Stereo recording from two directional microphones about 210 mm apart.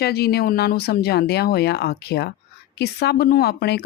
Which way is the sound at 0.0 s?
50° left (ahead or behind).